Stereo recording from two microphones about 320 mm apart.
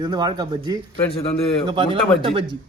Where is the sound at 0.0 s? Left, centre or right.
Centre.